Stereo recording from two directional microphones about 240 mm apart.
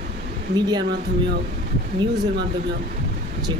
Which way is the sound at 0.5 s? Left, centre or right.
Centre.